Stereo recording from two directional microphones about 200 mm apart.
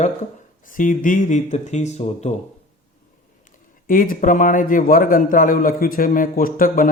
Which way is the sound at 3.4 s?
45° left (ahead or behind).